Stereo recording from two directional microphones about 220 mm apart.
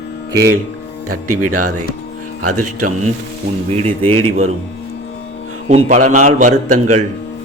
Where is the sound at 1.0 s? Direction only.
90° right.